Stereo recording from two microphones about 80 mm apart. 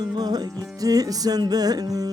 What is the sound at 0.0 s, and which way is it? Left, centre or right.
Music, right.